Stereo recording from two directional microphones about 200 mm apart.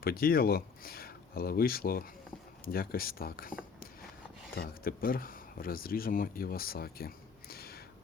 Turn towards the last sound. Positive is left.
turn(degrees=50)  # may be behind; listen again after turning